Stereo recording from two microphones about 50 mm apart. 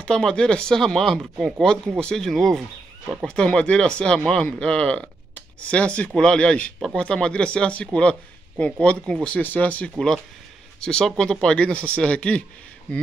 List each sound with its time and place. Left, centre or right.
0.0 s speech: centre
3.3 s speech: centre
9.4 s speech: left
9.9 s speech: centre